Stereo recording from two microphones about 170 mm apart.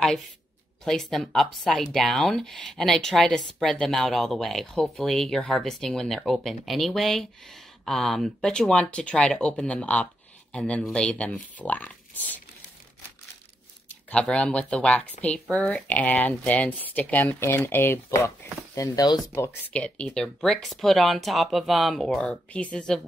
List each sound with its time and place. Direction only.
0.8 s speech: centre (ahead or behind)
14.1 s speech: 5° left (ahead or behind)